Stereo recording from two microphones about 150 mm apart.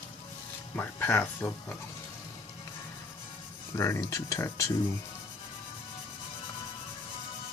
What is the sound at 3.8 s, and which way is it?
Speech, 20° left (ahead or behind).